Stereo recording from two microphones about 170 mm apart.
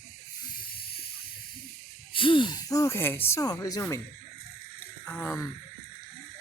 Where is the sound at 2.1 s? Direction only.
30° left (ahead or behind).